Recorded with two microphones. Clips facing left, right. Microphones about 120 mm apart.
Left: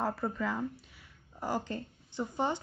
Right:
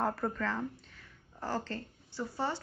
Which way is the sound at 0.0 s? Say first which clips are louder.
Even; centre (ahead or behind).